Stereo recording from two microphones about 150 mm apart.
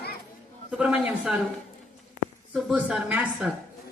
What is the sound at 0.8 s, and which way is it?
Speech, 5° right (ahead or behind).